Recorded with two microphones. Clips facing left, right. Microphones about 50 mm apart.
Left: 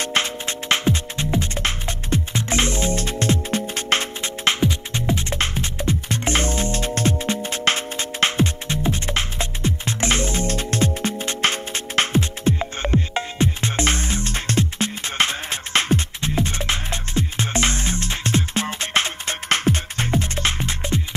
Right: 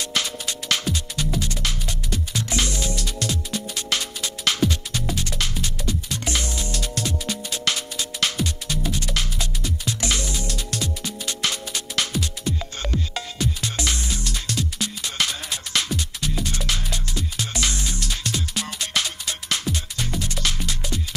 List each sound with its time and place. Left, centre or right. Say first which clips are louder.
0.0 s music: left 4 dB; left